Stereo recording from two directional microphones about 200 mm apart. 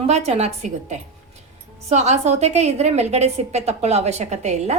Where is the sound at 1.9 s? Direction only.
35° right (ahead or behind).